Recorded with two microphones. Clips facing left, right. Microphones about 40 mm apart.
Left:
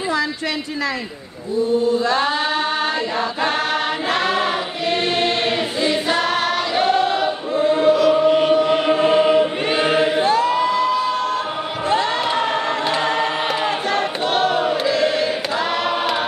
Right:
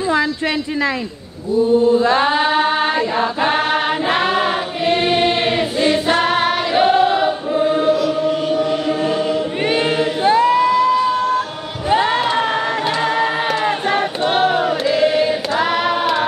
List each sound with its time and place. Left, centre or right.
2.0 s choir: right
7.7 s chant: centre
8.1 s chant: left
9.8 s choir: left
10.2 s crowd: right
11.9 s crowd: right
12.4 s a sound: right
13.2 s choir: centre
13.7 s choir: right
15.7 s a sound: centre